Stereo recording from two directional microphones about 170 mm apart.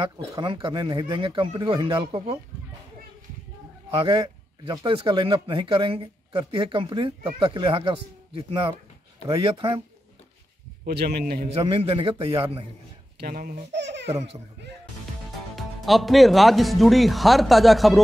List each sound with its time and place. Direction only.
0.0 s speech: 30° right (ahead or behind)
3.9 s speech: 30° right (ahead or behind)
10.9 s a man's voice: 70° right (ahead or behind)
11.4 s speech: 35° right (ahead or behind)
13.2 s speech: 55° right (ahead or behind)
13.7 s baby cry: 90° right
14.0 s speech: 35° right (ahead or behind)
15.5 s speech: centre (ahead or behind)